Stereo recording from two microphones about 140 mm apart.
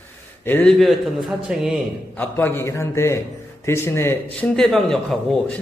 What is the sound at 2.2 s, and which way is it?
A man's voice, 15° left (ahead or behind).